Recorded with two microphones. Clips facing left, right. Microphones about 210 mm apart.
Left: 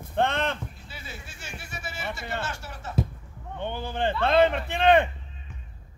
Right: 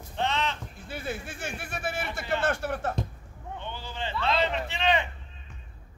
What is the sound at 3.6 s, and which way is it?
Speech, 55° left (ahead or behind).